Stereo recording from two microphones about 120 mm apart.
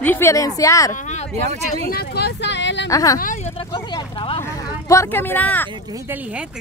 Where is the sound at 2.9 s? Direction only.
30° left (ahead or behind).